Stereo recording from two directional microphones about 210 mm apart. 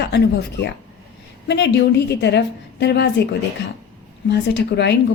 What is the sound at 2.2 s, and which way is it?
A woman's voice, 55° left (ahead or behind).